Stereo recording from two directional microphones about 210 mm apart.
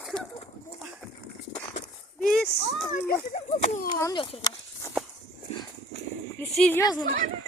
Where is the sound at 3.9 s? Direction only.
20° left (ahead or behind).